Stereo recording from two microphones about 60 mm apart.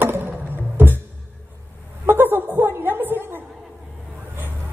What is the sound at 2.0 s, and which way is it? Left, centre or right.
Chuckle, right.